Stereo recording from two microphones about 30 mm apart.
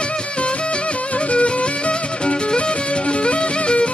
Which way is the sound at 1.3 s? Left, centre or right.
Left.